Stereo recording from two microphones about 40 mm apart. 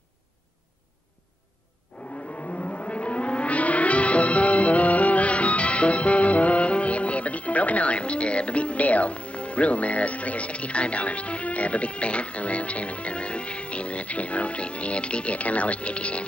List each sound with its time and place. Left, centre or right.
1.9 s music: left